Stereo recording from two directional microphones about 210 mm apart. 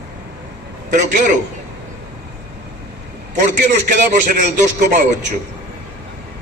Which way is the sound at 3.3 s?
35° right (ahead or behind).